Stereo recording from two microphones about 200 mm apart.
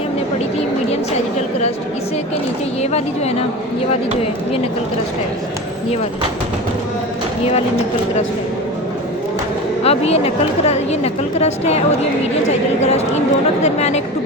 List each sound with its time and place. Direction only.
2.8 s a woman's voice: 30° left (ahead or behind)
9.8 s a woman's voice: 30° left (ahead or behind)
13.6 s a woman's voice: 35° left (ahead or behind)